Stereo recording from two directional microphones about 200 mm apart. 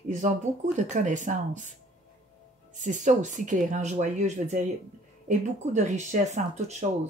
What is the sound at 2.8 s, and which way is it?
Speech, 40° right (ahead or behind).